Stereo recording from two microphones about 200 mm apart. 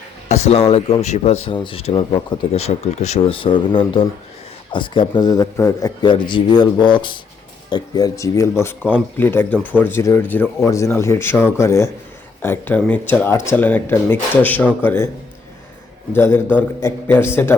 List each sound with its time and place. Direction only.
0.3 s speech: 30° left (ahead or behind); by 15.1 s 10° left (ahead or behind)
16.1 s speech: 10° left (ahead or behind)